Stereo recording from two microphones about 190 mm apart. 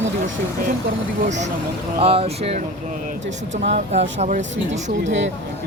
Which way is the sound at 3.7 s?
35° right (ahead or behind).